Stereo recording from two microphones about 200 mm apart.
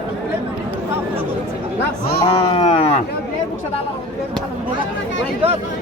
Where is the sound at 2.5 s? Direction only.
25° left (ahead or behind).